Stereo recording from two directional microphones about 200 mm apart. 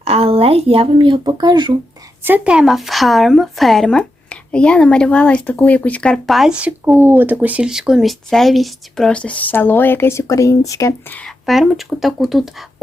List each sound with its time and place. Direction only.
0.0 s speech: 30° right (ahead or behind)
2.2 s speech: 10° right (ahead or behind)